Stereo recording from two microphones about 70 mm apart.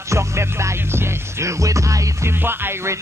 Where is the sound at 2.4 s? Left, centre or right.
Right.